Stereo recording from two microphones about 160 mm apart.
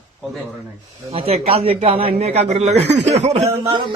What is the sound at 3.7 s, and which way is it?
Speech, 30° right (ahead or behind).